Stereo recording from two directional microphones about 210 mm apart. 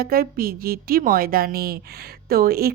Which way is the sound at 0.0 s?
45° right (ahead or behind).